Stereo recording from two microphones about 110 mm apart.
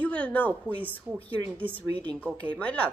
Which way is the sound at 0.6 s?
15° right (ahead or behind).